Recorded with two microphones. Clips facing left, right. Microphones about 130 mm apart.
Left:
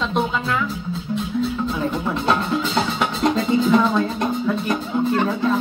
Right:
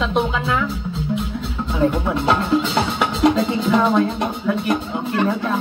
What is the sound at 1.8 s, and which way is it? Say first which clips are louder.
Speech: right 4 dB; 5° right (ahead or behind).